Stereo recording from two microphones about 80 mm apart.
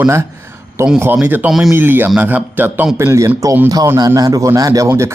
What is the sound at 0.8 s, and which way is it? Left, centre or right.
Speech, right.